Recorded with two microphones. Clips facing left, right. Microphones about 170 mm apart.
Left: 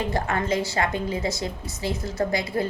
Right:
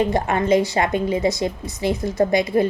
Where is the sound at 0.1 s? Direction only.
20° right (ahead or behind).